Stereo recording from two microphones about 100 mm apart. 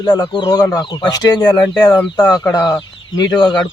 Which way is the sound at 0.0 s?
45° left (ahead or behind).